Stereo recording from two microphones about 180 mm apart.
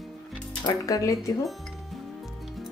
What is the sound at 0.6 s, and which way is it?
Speech, 20° left (ahead or behind).